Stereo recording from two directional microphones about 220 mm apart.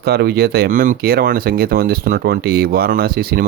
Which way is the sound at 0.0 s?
45° right (ahead or behind).